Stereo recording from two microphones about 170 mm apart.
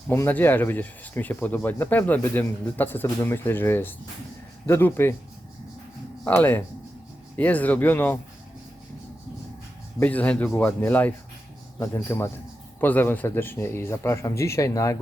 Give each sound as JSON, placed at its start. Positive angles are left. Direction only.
{"t": 0.1, "sound": "speech", "side_deg": 10}
{"t": 6.2, "sound": "speech", "side_deg": 10}
{"t": 10.0, "sound": "speech", "side_deg": 10}